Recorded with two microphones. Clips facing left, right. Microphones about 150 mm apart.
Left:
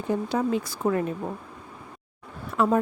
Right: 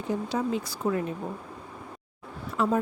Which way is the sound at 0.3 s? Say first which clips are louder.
Left 3 dB; 55° left (ahead or behind).